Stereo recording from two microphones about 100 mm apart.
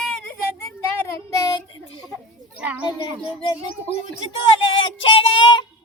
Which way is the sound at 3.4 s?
55° left (ahead or behind).